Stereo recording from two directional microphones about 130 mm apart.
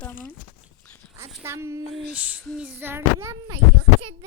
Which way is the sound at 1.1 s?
20° right (ahead or behind).